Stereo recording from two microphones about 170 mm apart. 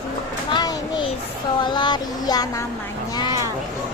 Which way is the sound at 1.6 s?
25° left (ahead or behind).